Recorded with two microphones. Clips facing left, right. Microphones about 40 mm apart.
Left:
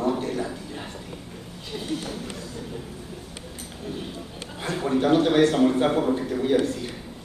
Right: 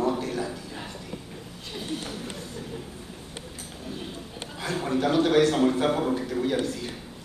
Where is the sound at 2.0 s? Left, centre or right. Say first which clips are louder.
Left 2 dB; right.